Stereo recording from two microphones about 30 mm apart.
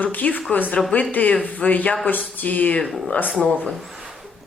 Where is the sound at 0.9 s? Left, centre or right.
Left.